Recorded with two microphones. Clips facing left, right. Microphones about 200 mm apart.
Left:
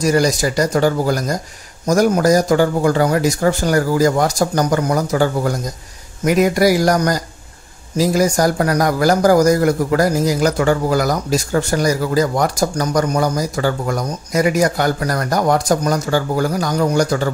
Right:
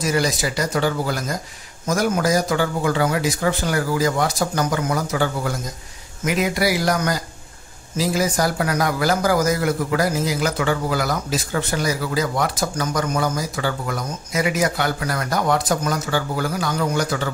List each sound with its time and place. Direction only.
0.0 s speech: 45° left (ahead or behind)